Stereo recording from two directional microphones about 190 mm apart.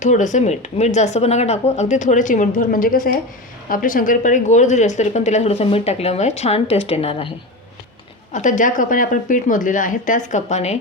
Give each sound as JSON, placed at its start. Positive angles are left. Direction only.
{"t": 0.0, "sound": "speech", "side_deg": 40}
{"t": 8.3, "sound": "speech", "side_deg": 40}